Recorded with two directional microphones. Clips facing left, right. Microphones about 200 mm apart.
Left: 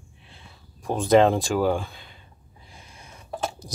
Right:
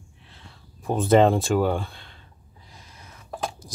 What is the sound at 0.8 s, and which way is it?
Speech, 5° right (ahead or behind).